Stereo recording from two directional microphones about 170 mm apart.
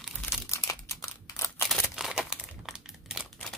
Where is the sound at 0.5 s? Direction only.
20° left (ahead or behind).